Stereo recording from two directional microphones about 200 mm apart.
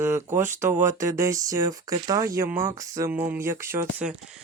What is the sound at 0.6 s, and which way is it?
Speech, 10° right (ahead or behind).